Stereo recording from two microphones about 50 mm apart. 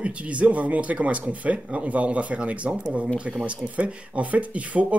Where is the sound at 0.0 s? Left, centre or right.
Right.